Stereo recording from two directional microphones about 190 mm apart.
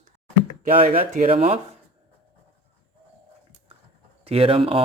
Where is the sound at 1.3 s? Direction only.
30° right (ahead or behind).